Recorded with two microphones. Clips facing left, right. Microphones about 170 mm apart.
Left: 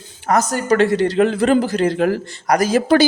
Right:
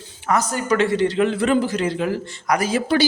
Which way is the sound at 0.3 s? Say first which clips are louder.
Left 4 dB; 40° left (ahead or behind).